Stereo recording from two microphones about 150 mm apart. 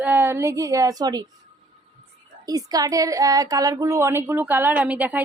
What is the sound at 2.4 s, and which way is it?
Speech, 25° right (ahead or behind).